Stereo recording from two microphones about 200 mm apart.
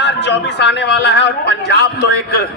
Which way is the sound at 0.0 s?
60° left (ahead or behind).